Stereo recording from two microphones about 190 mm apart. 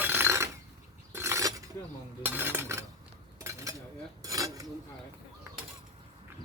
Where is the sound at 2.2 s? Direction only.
10° right (ahead or behind).